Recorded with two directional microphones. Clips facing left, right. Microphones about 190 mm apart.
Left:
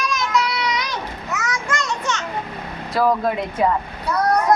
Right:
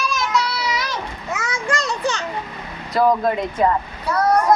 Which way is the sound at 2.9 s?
5° left (ahead or behind).